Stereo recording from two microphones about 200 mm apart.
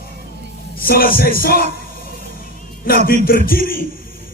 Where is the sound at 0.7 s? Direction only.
45° left (ahead or behind).